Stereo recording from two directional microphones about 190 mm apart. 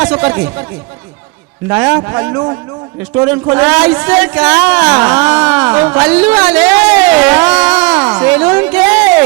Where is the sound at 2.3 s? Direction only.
20° right (ahead or behind).